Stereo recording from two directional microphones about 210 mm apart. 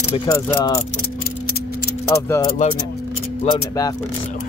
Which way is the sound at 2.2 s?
15° left (ahead or behind).